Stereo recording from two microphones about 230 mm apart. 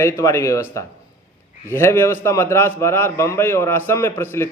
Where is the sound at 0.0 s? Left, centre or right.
Centre.